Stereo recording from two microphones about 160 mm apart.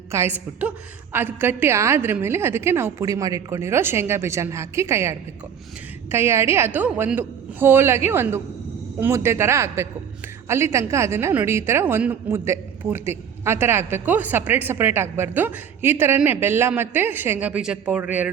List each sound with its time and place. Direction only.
0.1 s a woman's voice: 15° right (ahead or behind)